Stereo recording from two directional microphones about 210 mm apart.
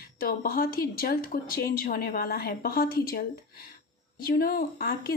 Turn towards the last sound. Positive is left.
turn(degrees=45)  # may be behind; listen again after turning